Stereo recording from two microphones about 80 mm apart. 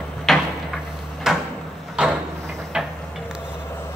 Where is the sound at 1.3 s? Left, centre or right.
Centre.